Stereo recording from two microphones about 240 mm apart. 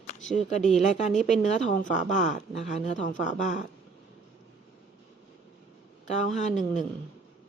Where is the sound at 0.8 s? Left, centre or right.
Left.